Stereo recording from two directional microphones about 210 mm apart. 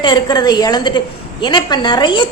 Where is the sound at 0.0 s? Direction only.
20° left (ahead or behind).